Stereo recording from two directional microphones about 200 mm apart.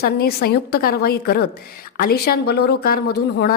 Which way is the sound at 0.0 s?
50° left (ahead or behind).